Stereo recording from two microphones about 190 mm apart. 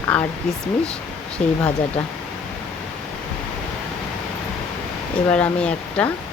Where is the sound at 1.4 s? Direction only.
35° left (ahead or behind).